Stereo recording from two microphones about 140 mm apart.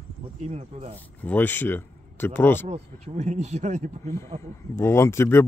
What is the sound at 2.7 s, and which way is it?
Speech, 50° right (ahead or behind).